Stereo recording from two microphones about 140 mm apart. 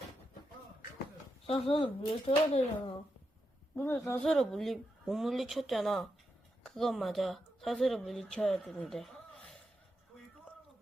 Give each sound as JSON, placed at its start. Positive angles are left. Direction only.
{"t": 1.5, "sound": "speech", "side_deg": 40}
{"t": 3.8, "sound": "speech", "side_deg": 20}
{"t": 4.2, "sound": "speech", "side_deg": 5}